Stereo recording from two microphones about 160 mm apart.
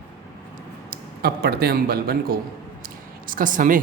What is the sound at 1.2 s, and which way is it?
Speech, 75° right (ahead or behind).